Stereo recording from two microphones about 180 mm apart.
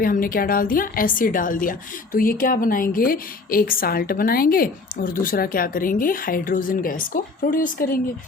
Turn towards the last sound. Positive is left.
turn(degrees=50)  # may be behind; listen again after turning